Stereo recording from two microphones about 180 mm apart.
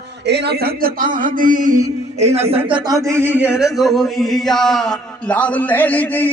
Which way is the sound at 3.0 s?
15° right (ahead or behind).